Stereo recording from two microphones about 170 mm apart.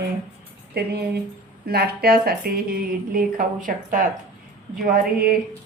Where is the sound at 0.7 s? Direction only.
70° right (ahead or behind).